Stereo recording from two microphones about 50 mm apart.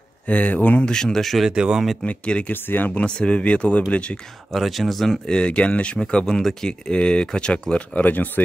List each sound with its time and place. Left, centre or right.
0.3 s speech: left
0.8 s speech: centre
1.5 s speech: centre
2.0 s speech: left
2.5 s speech: left
2.9 s speech: left
4.5 s speech: centre; by 8.0 s left
8.0 s speech: left